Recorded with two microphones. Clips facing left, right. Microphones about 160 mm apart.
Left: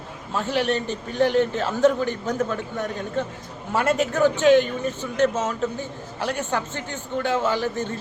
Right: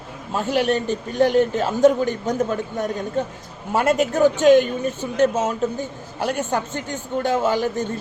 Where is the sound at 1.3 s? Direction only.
10° right (ahead or behind).